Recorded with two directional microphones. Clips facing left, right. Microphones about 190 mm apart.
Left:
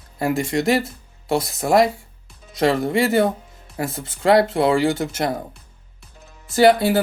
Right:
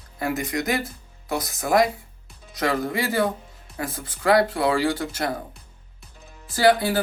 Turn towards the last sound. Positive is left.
turn(degrees=25)  # may be behind; listen again after turning